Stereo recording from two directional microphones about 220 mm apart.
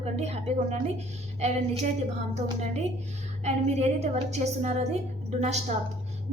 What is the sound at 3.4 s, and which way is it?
A woman's voice, 30° right (ahead or behind).